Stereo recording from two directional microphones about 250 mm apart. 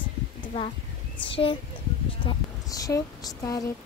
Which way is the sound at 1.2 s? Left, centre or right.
Left.